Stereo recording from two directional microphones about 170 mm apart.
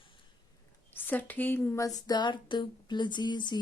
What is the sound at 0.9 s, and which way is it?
Speech, 10° left (ahead or behind).